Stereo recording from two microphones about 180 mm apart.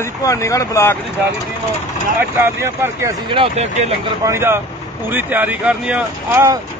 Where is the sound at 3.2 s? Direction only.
30° right (ahead or behind).